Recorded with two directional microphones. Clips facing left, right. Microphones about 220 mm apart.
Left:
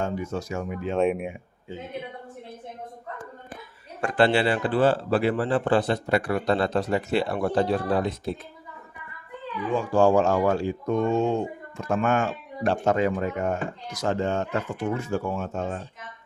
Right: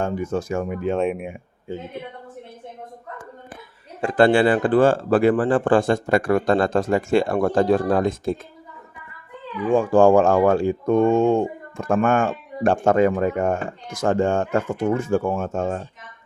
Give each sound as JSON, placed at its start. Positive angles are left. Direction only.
{"t": 0.0, "sound": "speech", "side_deg": -50}
{"t": 0.9, "sound": "speech", "side_deg": 0}
{"t": 4.1, "sound": "speech", "side_deg": -50}
{"t": 9.6, "sound": "speech", "side_deg": -50}